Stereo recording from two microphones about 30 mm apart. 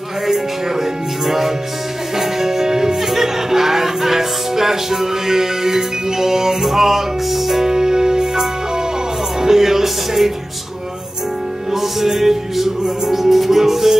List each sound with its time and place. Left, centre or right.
0.3 s music: centre
7.6 s music: right
11.7 s music: centre